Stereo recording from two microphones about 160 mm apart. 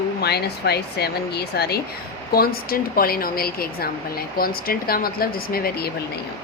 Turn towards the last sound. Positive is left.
turn(degrees=75)  # may be behind; listen again after turning